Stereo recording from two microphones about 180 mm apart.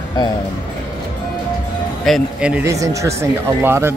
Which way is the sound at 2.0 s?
Centre (ahead or behind).